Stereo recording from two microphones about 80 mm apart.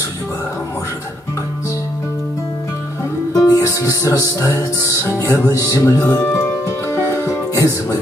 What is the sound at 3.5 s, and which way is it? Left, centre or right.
Music, left.